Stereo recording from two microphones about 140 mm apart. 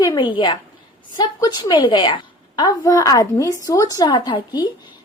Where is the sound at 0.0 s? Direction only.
30° left (ahead or behind).